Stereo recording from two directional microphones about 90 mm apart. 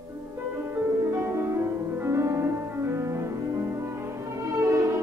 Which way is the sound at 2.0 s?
30° right (ahead or behind).